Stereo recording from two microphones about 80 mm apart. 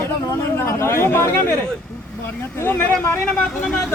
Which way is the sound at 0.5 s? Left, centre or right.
Left.